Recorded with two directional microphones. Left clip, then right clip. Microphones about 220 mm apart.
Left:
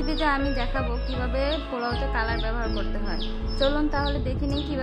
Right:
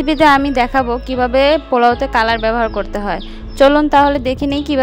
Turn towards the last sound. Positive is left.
turn(degrees=-40)  # may be behind; listen again after turning